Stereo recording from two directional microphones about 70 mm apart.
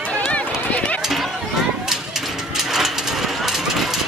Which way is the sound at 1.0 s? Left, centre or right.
Centre.